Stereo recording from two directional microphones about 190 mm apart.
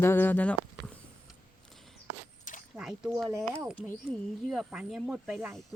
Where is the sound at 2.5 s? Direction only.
45° left (ahead or behind).